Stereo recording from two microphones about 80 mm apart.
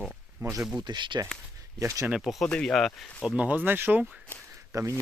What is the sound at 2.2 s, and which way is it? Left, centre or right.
Speech, centre.